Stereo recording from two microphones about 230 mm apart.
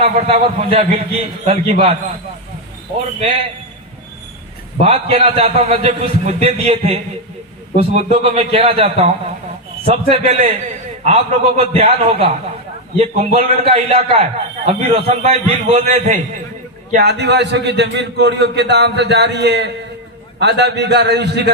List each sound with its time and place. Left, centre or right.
0.0 s a man's voice: right
4.8 s a man's voice: right
16.9 s a man's voice: right